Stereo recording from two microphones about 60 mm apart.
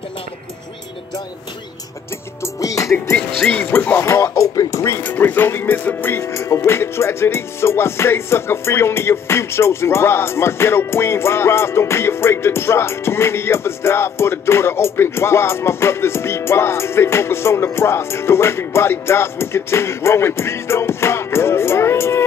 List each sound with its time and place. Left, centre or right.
2.4 s music: left
3.7 s speech: left
4.0 s speech: left
5.0 s speech: left
6.2 s music: left